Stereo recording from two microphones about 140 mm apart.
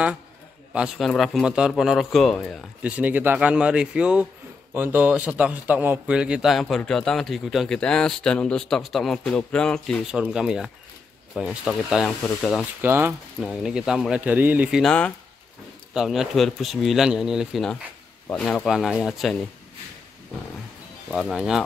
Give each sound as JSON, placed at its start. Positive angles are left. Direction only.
{"t": 0.7, "sound": "a man's voice", "side_deg": 0}
{"t": 2.8, "sound": "a man's voice", "side_deg": -10}
{"t": 12.8, "sound": "a man's voice", "side_deg": -15}
{"t": 13.4, "sound": "a man's voice", "side_deg": 0}
{"t": 14.8, "sound": "a man's voice", "side_deg": 5}
{"t": 21.1, "sound": "a man's voice", "side_deg": -5}